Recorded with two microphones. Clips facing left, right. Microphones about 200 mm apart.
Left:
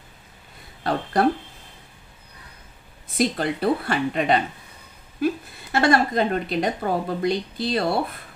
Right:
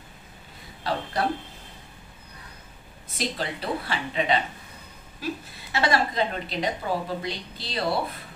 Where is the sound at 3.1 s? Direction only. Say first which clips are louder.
Left 8 dB; 55° left (ahead or behind).